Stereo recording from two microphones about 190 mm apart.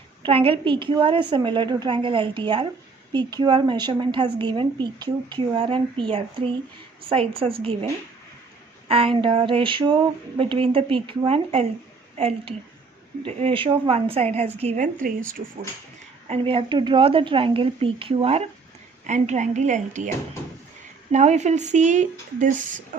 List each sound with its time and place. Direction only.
0.2 s a woman's voice: 30° right (ahead or behind)
8.9 s a woman's voice: 30° right (ahead or behind)
15.0 s speech: 45° right (ahead or behind)
16.3 s a woman's voice: 30° right (ahead or behind)
21.1 s speech: 35° right (ahead or behind)